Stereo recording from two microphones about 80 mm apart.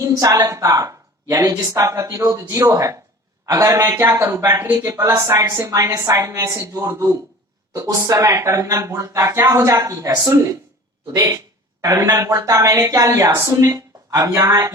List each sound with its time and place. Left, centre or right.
0.0 s speech: right
4.0 s a woman's voice: right